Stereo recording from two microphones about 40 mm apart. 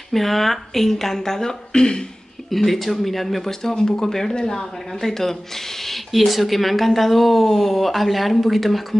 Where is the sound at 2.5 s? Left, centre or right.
Centre.